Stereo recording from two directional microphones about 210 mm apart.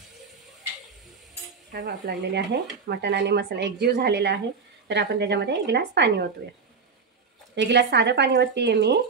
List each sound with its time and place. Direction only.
1.7 s a woman's voice: 55° right (ahead or behind)
7.5 s a woman's voice: 55° right (ahead or behind)